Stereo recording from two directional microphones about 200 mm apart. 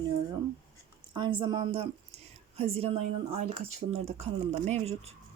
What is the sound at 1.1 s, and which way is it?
A woman's voice, 25° right (ahead or behind).